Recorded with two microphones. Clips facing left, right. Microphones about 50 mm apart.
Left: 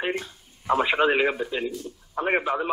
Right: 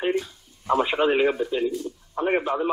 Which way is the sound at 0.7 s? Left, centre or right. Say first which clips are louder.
Even; centre.